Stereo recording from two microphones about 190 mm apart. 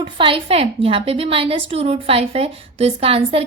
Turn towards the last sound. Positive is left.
turn(degrees=-30)  # may be behind; listen again after turning